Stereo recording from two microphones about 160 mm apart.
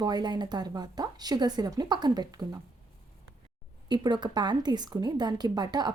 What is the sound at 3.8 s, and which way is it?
A woman's voice, 30° right (ahead or behind).